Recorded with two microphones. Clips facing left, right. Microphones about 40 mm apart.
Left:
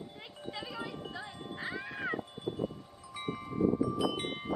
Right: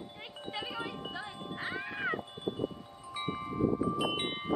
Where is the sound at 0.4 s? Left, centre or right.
Right.